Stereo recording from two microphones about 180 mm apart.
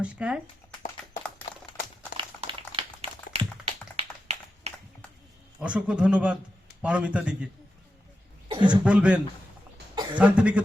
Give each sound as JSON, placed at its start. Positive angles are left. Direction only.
{"t": 0.0, "sound": "a man's voice", "side_deg": -5}
{"t": 2.1, "sound": "a sound", "side_deg": -30}
{"t": 5.5, "sound": "a man's voice", "side_deg": -5}
{"t": 8.4, "sound": "a sound", "side_deg": -30}
{"t": 8.7, "sound": "a man's voice", "side_deg": -5}
{"t": 9.9, "sound": "cough", "side_deg": -25}
{"t": 10.2, "sound": "a man's voice", "side_deg": -5}